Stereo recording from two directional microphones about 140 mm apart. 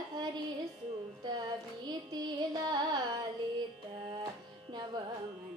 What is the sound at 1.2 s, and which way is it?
Child singing, 30° right (ahead or behind).